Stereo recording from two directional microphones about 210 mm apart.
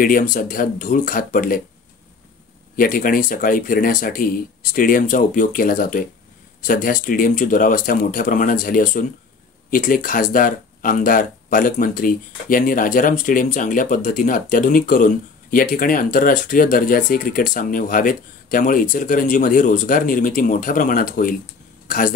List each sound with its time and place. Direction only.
0.0 s speech: 40° left (ahead or behind)
2.7 s speech: 40° left (ahead or behind)